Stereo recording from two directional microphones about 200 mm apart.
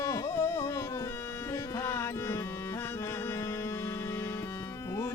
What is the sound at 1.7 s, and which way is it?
Music, 10° left (ahead or behind).